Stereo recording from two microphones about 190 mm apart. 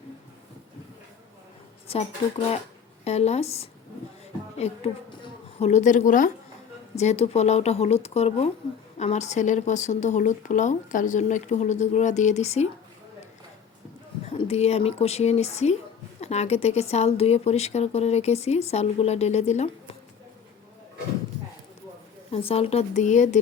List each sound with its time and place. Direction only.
1.9 s a woman's voice: 30° left (ahead or behind)
14.3 s speech: 35° left (ahead or behind)
22.3 s speech: 30° left (ahead or behind)